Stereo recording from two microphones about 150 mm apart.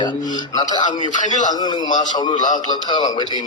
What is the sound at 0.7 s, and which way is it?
Speech, 30° left (ahead or behind).